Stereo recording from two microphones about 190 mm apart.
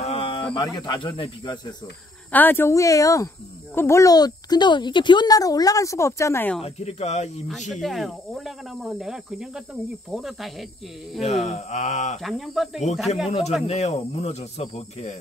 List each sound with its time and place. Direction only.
0.0 s speech: 30° left (ahead or behind)
2.3 s speech: 10° left (ahead or behind)
6.6 s speech: 35° left (ahead or behind)
7.7 s speech: centre (ahead or behind)
11.2 s speech: 35° left (ahead or behind)
12.2 s speech: centre (ahead or behind)
13.1 s speech: 35° left (ahead or behind)